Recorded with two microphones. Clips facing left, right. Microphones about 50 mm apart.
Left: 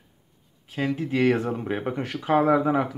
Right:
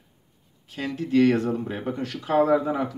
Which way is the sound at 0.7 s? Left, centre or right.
Centre.